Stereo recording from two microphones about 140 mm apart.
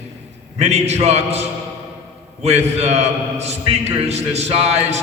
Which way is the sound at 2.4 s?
50° right (ahead or behind).